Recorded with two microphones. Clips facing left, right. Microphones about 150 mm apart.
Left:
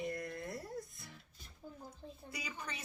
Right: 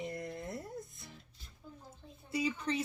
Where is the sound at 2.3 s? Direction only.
30° right (ahead or behind).